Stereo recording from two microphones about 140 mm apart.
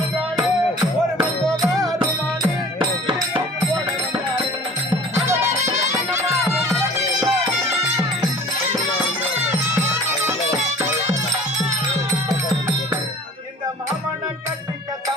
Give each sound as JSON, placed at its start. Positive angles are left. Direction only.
{"t": 1.1, "sound": "music", "side_deg": -25}
{"t": 5.9, "sound": "music", "side_deg": -20}